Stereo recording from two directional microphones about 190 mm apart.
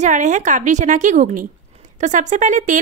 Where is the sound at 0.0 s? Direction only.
40° right (ahead or behind).